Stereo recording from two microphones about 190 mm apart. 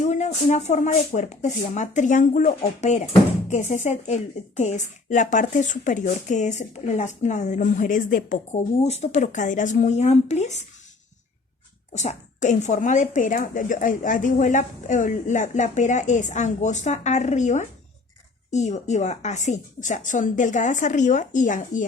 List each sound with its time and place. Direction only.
0.0 s a woman's voice: 40° left (ahead or behind)
11.9 s a woman's voice: 40° left (ahead or behind)